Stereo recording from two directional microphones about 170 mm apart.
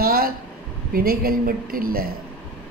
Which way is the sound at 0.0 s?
60° right (ahead or behind).